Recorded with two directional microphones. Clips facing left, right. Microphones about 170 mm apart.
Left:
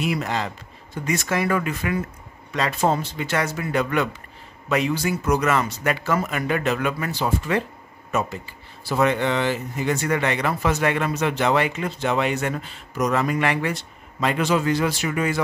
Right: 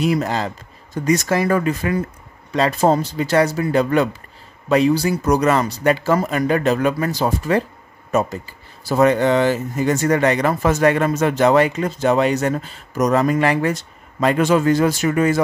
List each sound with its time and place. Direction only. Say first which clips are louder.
0.0 s speech: right 5 dB; 40° right (ahead or behind)